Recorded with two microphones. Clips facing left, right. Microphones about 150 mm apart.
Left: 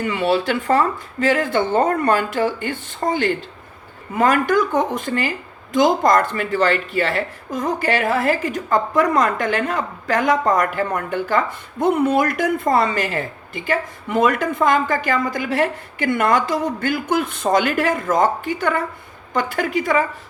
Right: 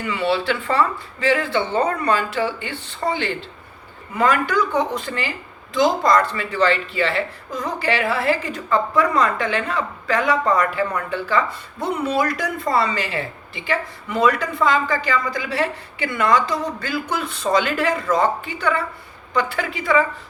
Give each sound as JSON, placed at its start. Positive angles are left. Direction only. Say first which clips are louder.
{"t": 0.0, "sound": "speech", "louder": "left 2 dB", "side_deg": 45}